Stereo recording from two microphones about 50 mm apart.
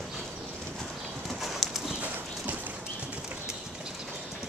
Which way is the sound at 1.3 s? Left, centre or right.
Centre.